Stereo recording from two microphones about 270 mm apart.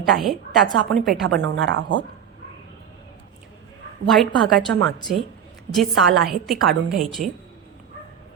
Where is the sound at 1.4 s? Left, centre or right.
Right.